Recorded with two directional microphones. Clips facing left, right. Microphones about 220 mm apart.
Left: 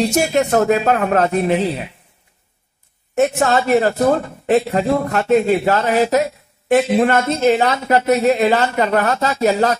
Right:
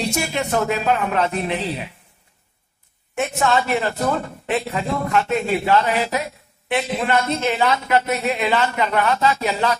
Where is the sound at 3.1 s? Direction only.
40° left (ahead or behind).